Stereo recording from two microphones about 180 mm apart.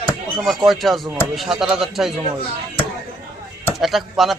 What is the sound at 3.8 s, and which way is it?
Speech, centre (ahead or behind).